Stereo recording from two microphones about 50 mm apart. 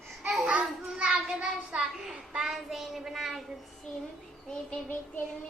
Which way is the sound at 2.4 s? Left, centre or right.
Centre.